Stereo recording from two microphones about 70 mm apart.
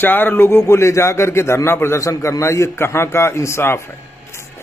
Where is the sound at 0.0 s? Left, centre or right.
Left.